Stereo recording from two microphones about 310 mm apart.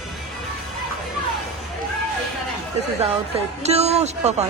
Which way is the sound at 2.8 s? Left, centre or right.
Right.